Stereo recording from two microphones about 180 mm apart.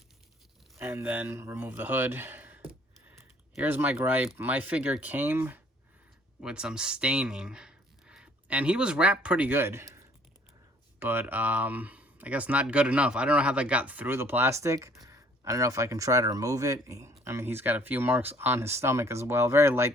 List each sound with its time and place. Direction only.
0.8 s speech: 10° right (ahead or behind)
11.0 s speech: 10° right (ahead or behind)